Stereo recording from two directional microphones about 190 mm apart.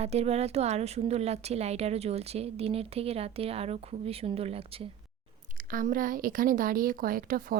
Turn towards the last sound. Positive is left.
turn(degrees=-45)  # may be behind; listen again after turning